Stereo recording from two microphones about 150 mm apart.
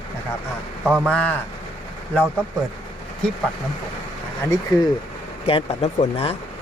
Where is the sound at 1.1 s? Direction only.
5° left (ahead or behind).